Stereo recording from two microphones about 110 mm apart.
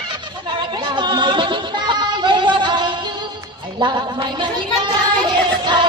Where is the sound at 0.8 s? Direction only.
45° right (ahead or behind).